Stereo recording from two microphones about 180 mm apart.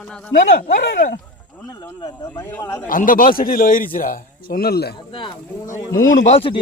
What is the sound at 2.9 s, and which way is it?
A man's voice, 50° left (ahead or behind).